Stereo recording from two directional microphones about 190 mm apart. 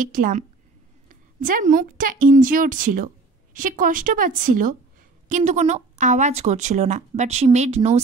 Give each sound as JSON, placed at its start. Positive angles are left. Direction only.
{"t": 0.0, "sound": "a woman's voice", "side_deg": -45}